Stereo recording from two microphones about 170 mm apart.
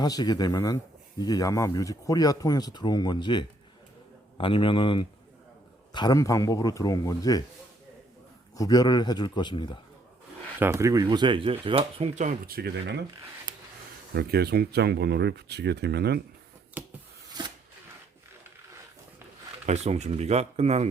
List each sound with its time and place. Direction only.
0.0 s a man's voice: 20° left (ahead or behind)
8.5 s speech: 20° left (ahead or behind)
10.6 s speech: 15° right (ahead or behind); by 13.0 s 65° right (ahead or behind)
13.5 s a sound: 25° right (ahead or behind)
14.1 s speech: 70° right (ahead or behind)
16.8 s a sound: 10° right (ahead or behind)
19.6 s speech: 40° right (ahead or behind)